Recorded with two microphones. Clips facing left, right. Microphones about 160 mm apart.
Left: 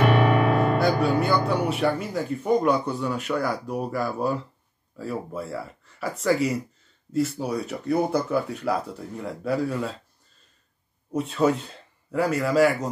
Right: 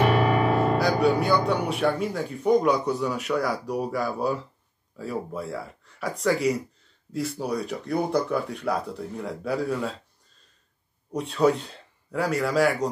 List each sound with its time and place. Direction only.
0.1 s music: 65° left (ahead or behind)
0.7 s speech: centre (ahead or behind)
11.1 s speech: centre (ahead or behind)